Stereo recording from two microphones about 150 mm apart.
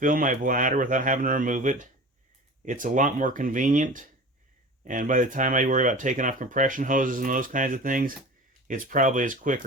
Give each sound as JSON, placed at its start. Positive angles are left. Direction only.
{"t": 0.0, "sound": "speech", "side_deg": -60}